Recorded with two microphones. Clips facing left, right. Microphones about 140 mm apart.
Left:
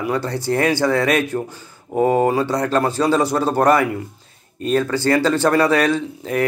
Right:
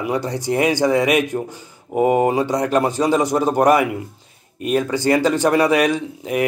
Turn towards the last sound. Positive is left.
turn(degrees=-15)  # may be behind; listen again after turning